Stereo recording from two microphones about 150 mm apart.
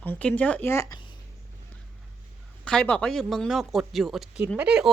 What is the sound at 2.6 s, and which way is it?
Speech, 5° left (ahead or behind).